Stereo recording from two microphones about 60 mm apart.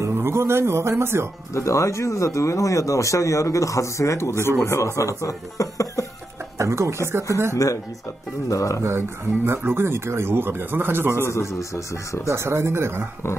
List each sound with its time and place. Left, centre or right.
0.0 s speech: right
1.5 s speech: left
6.6 s speech: right
7.5 s speech: left
8.8 s speech: right
11.2 s speech: left
12.3 s speech: right